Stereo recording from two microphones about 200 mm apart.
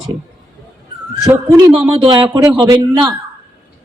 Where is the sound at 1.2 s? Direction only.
15° right (ahead or behind).